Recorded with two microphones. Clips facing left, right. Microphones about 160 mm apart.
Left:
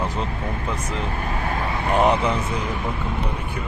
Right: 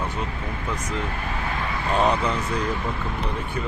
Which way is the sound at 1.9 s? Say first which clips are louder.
Left 3 dB; 20° left (ahead or behind).